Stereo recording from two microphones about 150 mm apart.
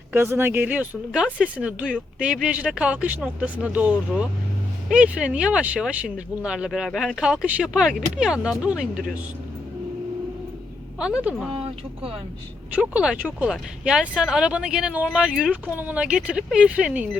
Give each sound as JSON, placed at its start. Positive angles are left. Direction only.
{"t": 0.1, "sound": "speech", "side_deg": -15}
{"t": 11.0, "sound": "speech", "side_deg": -5}
{"t": 11.5, "sound": "speech", "side_deg": -40}
{"t": 12.7, "sound": "speech", "side_deg": -10}